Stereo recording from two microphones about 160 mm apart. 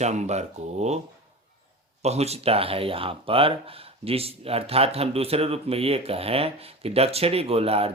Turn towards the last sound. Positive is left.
turn(degrees=-35)  # may be behind; listen again after turning